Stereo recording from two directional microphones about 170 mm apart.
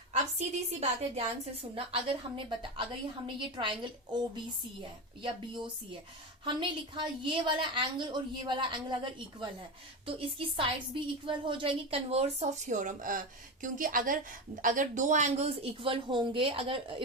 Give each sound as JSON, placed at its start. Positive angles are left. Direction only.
{"t": 0.1, "sound": "a woman's voice", "side_deg": -40}
{"t": 6.4, "sound": "a woman's voice", "side_deg": -30}